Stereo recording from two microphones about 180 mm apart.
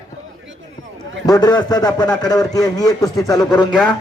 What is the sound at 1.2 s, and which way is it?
A man's voice, 20° left (ahead or behind).